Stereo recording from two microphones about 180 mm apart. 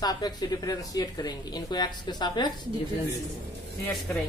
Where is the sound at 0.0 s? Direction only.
20° left (ahead or behind).